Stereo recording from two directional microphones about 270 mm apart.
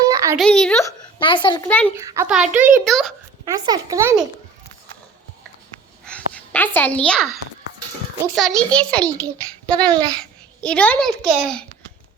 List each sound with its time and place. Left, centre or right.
0.1 s a sound: centre
0.3 s a child's voice: centre
1.2 s a child's voice: centre
1.6 s a child's voice: centre
2.0 s a child's voice: centre
3.4 s a child's voice: centre
6.1 s a sound: centre
8.4 s a child's voice: centre
9.7 s a child's voice: centre
10.6 s a child's voice: centre